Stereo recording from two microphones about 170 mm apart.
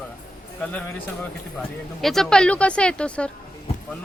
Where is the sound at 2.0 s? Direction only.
Centre (ahead or behind).